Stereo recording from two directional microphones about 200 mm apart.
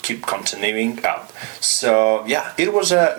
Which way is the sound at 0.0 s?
10° right (ahead or behind).